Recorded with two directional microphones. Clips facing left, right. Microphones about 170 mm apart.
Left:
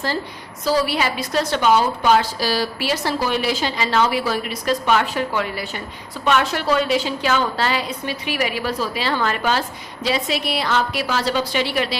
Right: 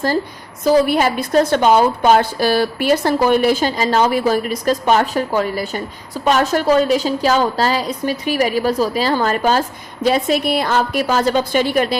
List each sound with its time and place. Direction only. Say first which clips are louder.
0.6 s a woman's voice: right 6 dB; 50° right (ahead or behind)